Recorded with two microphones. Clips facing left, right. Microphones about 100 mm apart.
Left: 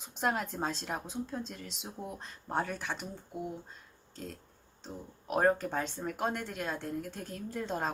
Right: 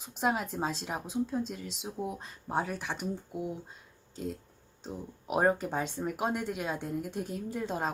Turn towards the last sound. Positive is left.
turn(degrees=-5)  # may be behind; listen again after turning